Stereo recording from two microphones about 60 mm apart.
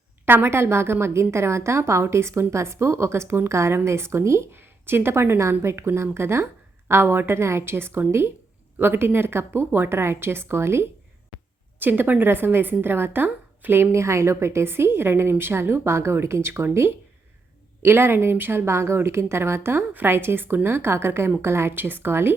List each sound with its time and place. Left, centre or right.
0.3 s a woman's voice: right
11.8 s a woman's voice: right
13.9 s a woman's voice: right